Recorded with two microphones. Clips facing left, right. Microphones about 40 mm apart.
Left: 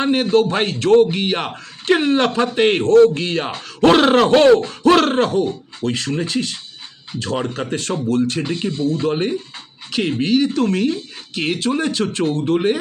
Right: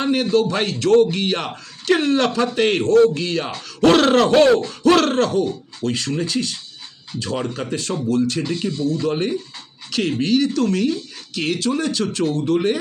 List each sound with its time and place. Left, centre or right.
0.0 s a man's voice: left
3.9 s a man's voice: left
4.3 s a man's voice: left
7.3 s a man's voice: left
9.1 s a man's voice: centre